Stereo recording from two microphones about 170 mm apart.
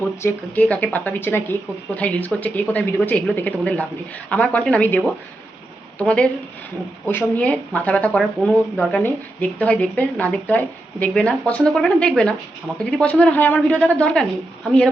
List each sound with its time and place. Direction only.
0.2 s speech: 10° left (ahead or behind)